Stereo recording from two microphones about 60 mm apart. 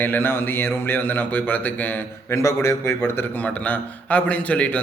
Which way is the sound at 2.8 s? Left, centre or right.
Left.